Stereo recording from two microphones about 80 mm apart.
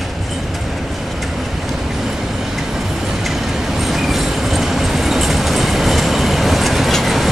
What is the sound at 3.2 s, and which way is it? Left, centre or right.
Train, centre.